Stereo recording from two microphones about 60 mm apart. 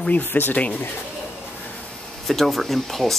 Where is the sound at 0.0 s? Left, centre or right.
Left.